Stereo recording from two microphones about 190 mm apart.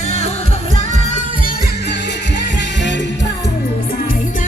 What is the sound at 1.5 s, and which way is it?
Music, 60° left (ahead or behind).